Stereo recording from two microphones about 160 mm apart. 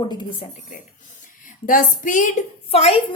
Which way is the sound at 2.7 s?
40° left (ahead or behind).